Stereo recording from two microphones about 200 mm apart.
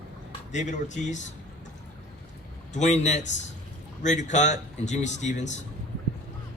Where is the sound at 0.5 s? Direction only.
35° left (ahead or behind).